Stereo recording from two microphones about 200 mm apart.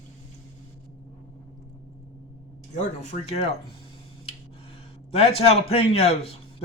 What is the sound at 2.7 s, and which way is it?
Speech, 35° left (ahead or behind).